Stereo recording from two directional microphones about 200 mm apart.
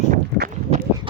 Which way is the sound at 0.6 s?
35° right (ahead or behind).